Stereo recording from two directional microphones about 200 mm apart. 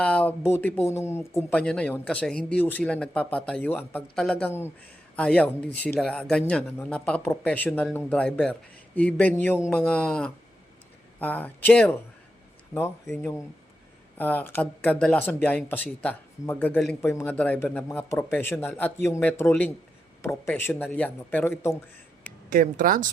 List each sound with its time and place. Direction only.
0.0 s speech: 5° left (ahead or behind)
22.4 s speech: 45° right (ahead or behind)